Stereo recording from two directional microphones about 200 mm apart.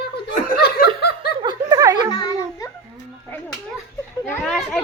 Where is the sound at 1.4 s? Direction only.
20° right (ahead or behind).